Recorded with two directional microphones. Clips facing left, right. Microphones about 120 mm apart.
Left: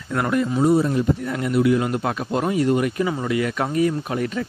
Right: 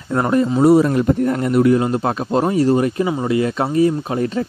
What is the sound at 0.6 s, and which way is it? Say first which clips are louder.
Speech: right 6 dB; 80° right.